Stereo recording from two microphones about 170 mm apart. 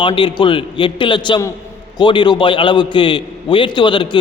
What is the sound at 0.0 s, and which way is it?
A man's voice, 30° left (ahead or behind).